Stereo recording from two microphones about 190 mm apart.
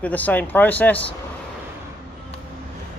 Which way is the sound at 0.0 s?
10° left (ahead or behind).